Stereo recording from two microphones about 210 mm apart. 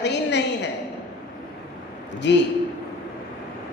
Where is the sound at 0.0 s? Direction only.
55° left (ahead or behind).